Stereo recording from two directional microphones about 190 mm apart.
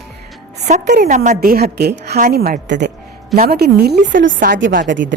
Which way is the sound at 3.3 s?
50° right (ahead or behind).